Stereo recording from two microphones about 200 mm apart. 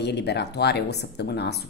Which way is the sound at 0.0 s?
55° left (ahead or behind).